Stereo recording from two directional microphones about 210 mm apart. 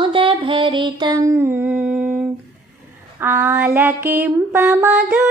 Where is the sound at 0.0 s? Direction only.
25° right (ahead or behind); by 2.1 s 5° right (ahead or behind).